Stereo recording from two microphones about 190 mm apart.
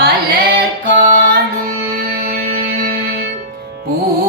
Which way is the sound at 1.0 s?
45° right (ahead or behind).